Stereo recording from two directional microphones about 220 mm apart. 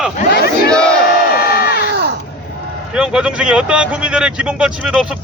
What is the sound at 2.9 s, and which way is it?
A man's voice, 5° right (ahead or behind).